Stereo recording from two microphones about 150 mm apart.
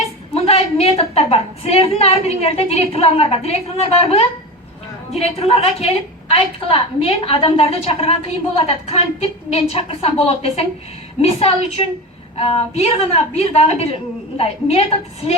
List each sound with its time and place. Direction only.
0.3 s a woman's voice: 45° left (ahead or behind)
5.2 s a woman's voice: 40° left (ahead or behind)